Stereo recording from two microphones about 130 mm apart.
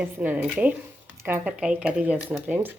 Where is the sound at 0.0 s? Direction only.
10° right (ahead or behind).